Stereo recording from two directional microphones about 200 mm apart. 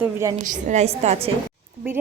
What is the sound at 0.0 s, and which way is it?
Speech, 15° right (ahead or behind).